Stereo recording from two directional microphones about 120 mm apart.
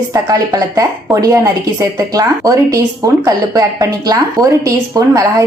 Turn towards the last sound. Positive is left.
turn(degrees=-30)  # may be behind; listen again after turning